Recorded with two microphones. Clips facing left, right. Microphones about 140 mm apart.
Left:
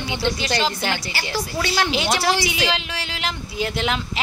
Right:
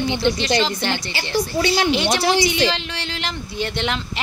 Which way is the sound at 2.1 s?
20° right (ahead or behind).